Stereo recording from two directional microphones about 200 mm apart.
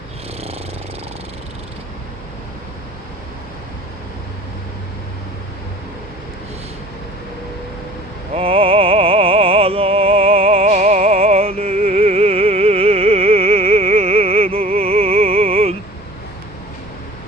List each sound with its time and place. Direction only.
8.4 s music: 30° right (ahead or behind)